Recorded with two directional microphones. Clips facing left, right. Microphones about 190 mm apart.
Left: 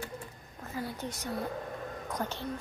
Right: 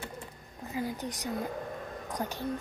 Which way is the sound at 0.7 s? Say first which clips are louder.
Right 3 dB; 15° right (ahead or behind).